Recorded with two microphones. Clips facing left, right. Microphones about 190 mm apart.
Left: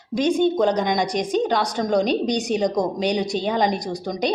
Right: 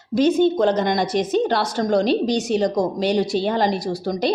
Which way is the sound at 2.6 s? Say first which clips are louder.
Right 1 dB; centre (ahead or behind).